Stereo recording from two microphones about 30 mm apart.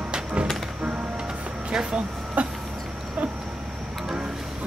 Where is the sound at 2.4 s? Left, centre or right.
Right.